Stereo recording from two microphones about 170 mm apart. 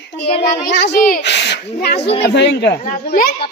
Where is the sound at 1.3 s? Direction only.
90° left; by 1.9 s 75° left (ahead or behind).